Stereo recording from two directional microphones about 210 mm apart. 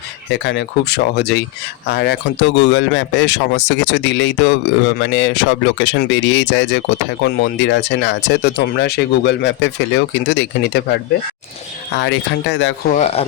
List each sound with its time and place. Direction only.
0.3 s speech: 55° left (ahead or behind)
12.9 s speech: 30° left (ahead or behind)